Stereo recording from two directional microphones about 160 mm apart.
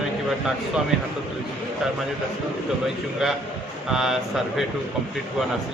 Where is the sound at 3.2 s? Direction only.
Centre (ahead or behind).